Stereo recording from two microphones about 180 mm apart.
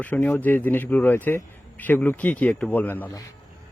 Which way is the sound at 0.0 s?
10° left (ahead or behind).